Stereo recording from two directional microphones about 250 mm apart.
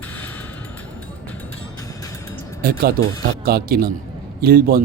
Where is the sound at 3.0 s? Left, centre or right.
Right.